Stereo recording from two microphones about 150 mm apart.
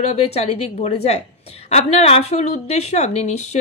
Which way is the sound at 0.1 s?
45° left (ahead or behind).